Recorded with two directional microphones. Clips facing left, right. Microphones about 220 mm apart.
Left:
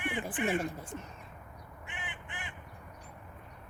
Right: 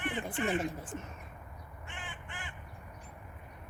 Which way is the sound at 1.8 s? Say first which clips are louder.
Left 1 dB; 20° left (ahead or behind).